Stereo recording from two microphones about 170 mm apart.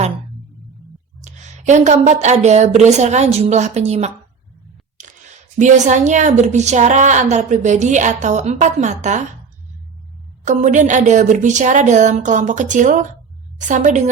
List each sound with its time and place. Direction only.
1.2 s a woman's voice: 45° right (ahead or behind)
5.0 s a sound: 45° right (ahead or behind)
5.5 s a woman's voice: 45° right (ahead or behind)
10.4 s a woman's voice: 45° right (ahead or behind)